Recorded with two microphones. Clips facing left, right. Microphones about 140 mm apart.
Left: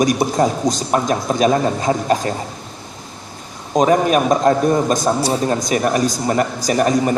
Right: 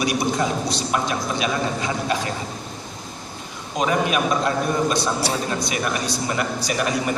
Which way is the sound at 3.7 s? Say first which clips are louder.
Left 7 dB; 40° left (ahead or behind).